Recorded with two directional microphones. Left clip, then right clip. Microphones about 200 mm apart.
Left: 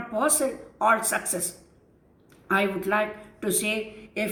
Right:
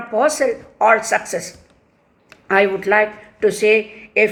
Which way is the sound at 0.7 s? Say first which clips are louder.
Right 8 dB; 30° right (ahead or behind).